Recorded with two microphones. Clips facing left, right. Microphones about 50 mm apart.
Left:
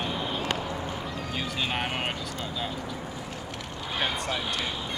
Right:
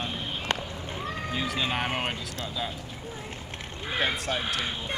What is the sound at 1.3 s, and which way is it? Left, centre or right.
Speech, centre.